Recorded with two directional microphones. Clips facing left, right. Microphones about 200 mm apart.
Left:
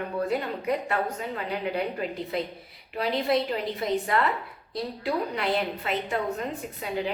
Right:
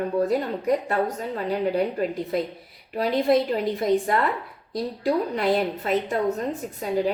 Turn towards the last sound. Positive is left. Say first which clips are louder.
# right 6 dB
turn(degrees=-45)  # may be behind; listen again after turning